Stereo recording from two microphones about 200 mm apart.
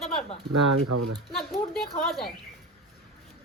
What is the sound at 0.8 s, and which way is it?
Speech, 90° right.